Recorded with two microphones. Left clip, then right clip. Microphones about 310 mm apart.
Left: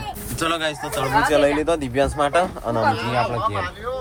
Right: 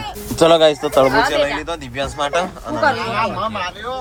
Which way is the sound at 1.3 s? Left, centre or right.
Centre.